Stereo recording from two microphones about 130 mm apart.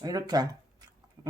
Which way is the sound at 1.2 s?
30° right (ahead or behind).